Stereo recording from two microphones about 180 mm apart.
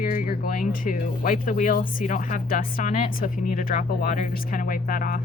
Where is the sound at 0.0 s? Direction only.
45° left (ahead or behind).